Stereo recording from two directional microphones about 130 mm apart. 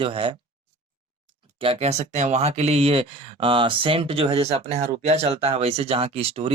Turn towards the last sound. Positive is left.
turn(degrees=-50)  # may be behind; listen again after turning